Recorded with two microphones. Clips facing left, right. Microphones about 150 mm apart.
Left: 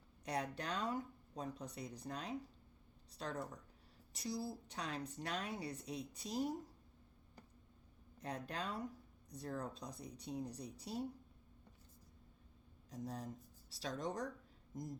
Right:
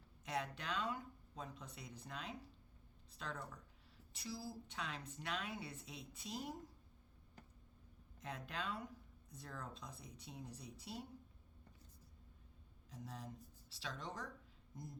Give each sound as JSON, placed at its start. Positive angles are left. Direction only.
{"t": 0.3, "sound": "speech", "side_deg": 40}
{"t": 8.2, "sound": "speech", "side_deg": 40}
{"t": 12.9, "sound": "speech", "side_deg": 40}